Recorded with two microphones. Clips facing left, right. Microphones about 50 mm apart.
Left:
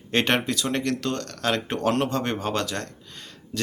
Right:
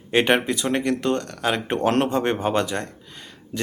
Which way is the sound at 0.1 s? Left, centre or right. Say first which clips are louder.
Right 4 dB; centre.